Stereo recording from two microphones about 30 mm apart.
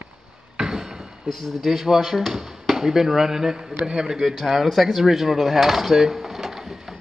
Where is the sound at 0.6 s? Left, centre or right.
Centre.